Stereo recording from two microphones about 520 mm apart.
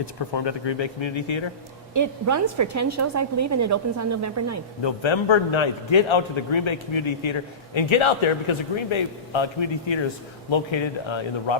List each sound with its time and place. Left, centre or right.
0.0 s a man's voice: left
1.9 s a woman's voice: right
4.8 s a man's voice: left